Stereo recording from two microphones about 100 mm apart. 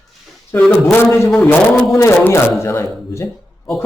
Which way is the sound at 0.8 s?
25° left (ahead or behind).